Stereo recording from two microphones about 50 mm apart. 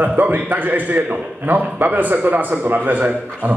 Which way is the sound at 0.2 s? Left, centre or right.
Right.